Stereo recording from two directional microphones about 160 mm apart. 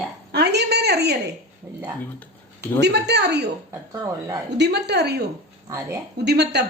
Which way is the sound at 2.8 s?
90° right.